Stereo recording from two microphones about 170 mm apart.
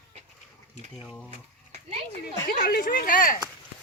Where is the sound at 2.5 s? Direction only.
60° left (ahead or behind).